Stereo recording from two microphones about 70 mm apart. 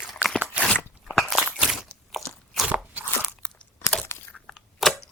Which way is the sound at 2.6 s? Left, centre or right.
Right.